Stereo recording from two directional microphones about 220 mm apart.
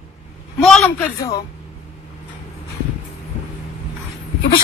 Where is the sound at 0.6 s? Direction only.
5° left (ahead or behind).